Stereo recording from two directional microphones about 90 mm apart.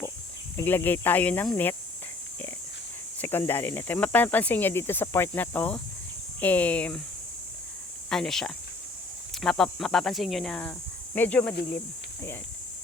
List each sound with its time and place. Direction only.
0.5 s speech: 20° left (ahead or behind)
3.2 s speech: 25° left (ahead or behind)
8.1 s speech: 5° left (ahead or behind)